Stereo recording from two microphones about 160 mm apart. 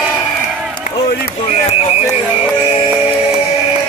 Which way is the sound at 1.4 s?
40° left (ahead or behind).